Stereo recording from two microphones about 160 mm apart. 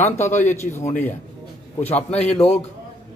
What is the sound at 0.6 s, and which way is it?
Speech, 15° left (ahead or behind).